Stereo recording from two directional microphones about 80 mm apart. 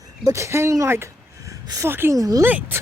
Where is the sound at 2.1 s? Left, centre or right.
Right.